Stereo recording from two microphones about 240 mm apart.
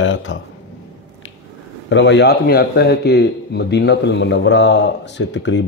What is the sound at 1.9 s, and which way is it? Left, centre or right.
Speech, left.